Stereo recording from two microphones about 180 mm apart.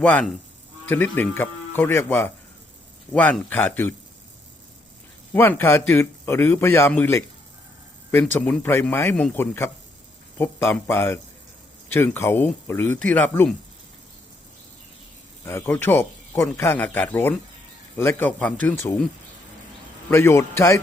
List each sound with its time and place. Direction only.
0.0 s a man's voice: 10° left (ahead or behind)
5.3 s a man's voice: 10° left (ahead or behind)
15.4 s a man's voice: 15° left (ahead or behind)
20.1 s a man's voice: 15° left (ahead or behind)